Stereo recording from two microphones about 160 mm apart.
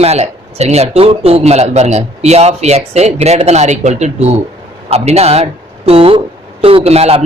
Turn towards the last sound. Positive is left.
turn(degrees=-40)  # may be behind; listen again after turning